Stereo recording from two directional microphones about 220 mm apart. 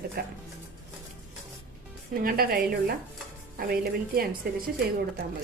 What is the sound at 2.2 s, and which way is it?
A woman's voice, 45° right (ahead or behind).